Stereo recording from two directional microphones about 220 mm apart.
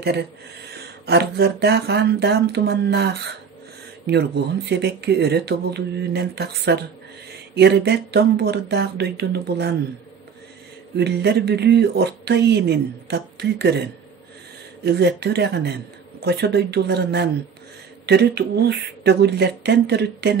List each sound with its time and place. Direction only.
0.0 s speech: 50° right (ahead or behind)
4.6 s speech: 50° right (ahead or behind)
11.0 s speech: 50° right (ahead or behind)